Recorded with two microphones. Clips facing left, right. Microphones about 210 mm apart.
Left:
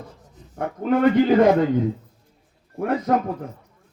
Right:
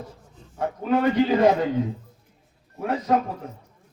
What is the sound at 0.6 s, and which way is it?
Speech, 50° left (ahead or behind).